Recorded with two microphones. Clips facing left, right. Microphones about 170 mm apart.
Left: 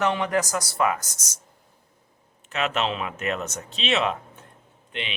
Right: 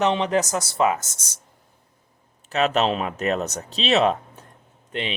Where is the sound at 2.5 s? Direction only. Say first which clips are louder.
Right 5 dB; 40° right (ahead or behind).